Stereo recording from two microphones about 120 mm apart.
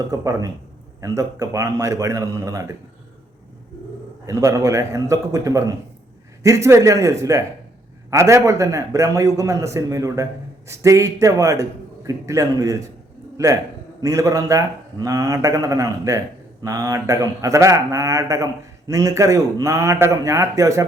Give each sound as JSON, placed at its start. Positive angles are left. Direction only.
{"t": 0.1, "sound": "a man's voice", "side_deg": -30}
{"t": 4.3, "sound": "a man's voice", "side_deg": -25}